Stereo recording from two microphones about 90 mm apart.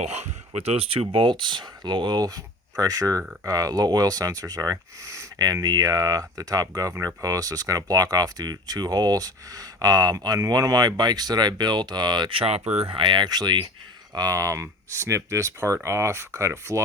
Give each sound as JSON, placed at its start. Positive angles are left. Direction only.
{"t": 0.8, "sound": "speech", "side_deg": -90}
{"t": 12.3, "sound": "speech", "side_deg": -90}
{"t": 12.8, "sound": "speech", "side_deg": -70}